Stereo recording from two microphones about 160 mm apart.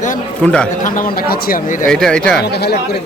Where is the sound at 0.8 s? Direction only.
65° left (ahead or behind).